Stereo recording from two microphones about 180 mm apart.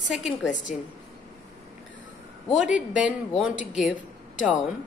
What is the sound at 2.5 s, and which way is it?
Speech, 5° right (ahead or behind).